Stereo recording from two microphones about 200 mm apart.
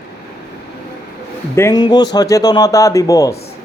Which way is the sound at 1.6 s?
20° left (ahead or behind).